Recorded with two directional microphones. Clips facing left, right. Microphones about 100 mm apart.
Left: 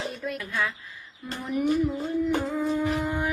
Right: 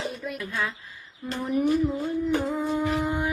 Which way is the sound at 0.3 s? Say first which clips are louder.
Left 1 dB; 25° right (ahead or behind).